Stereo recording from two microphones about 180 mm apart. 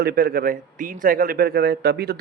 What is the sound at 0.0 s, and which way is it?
A man's voice, 60° right (ahead or behind).